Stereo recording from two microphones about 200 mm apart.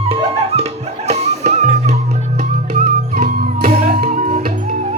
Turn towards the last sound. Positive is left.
turn(degrees=-35)  # may be behind; listen again after turning